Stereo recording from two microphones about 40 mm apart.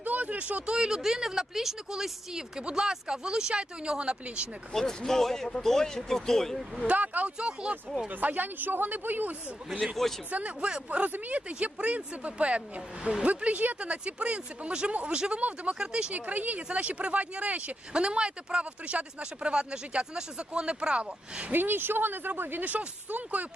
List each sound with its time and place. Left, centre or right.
0.0 s a sound: right
0.8 s speech: centre
4.7 s speech: centre
6.9 s speech: right
7.3 s speech: right
7.9 s speech: centre
8.2 s speech: right
9.8 s a man's voice: centre
10.3 s speech: right
13.7 s speech: right
15.4 s speech: right
15.8 s speech: right
21.5 s speech: right